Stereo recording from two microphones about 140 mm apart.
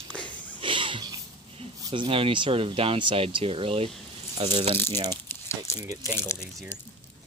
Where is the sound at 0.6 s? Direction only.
35° right (ahead or behind).